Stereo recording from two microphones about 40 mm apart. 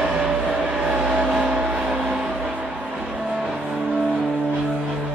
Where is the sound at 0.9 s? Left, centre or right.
Right.